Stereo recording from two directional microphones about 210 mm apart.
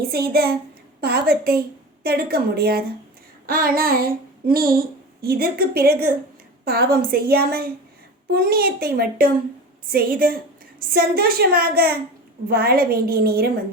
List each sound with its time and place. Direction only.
0.0 s a woman's voice: 45° right (ahead or behind)
3.4 s child singing: 45° right (ahead or behind)
5.2 s a woman's voice: 45° right (ahead or behind)